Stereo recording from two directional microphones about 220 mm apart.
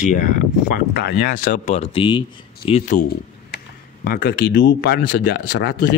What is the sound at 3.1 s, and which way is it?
Speech, 45° left (ahead or behind).